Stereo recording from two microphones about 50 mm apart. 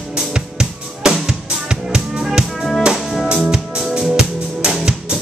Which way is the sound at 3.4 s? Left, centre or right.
Centre.